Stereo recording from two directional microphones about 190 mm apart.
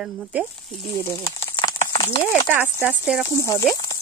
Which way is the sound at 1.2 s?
20° left (ahead or behind).